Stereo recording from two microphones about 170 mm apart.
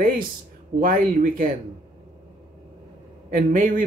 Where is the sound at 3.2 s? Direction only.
55° right (ahead or behind).